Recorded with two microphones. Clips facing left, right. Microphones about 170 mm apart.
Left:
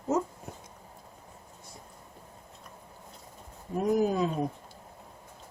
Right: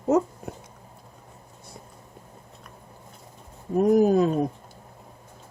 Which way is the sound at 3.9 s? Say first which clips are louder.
Right 7 dB; 50° right (ahead or behind).